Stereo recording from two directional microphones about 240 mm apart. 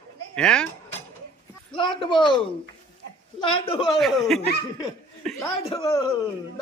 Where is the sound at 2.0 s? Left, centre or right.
Centre.